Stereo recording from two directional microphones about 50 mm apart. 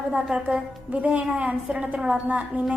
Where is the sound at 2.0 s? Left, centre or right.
Centre.